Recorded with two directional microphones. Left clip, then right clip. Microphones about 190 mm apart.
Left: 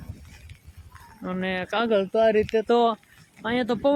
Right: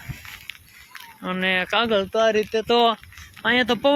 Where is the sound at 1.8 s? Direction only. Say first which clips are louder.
Left 2 dB; 15° left (ahead or behind).